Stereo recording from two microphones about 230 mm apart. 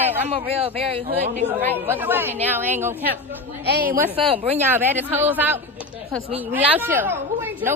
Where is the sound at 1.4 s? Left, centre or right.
Centre.